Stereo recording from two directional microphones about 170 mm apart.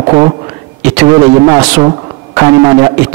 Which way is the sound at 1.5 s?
20° right (ahead or behind).